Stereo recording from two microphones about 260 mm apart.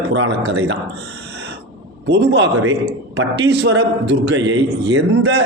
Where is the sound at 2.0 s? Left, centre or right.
Right.